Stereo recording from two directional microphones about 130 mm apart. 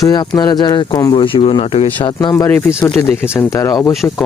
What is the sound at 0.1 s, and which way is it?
Speech, 30° left (ahead or behind).